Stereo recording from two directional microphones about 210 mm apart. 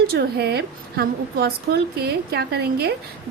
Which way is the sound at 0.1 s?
50° right (ahead or behind).